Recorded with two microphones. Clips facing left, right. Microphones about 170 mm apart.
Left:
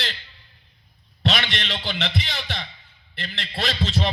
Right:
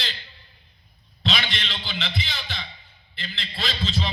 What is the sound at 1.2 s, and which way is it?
A man's voice, 65° left (ahead or behind).